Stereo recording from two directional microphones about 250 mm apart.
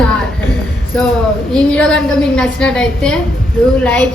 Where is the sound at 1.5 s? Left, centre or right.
Centre.